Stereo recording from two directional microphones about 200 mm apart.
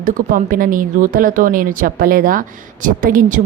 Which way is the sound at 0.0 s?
40° right (ahead or behind).